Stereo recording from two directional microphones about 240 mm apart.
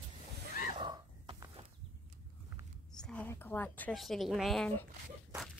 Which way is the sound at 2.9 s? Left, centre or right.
Centre.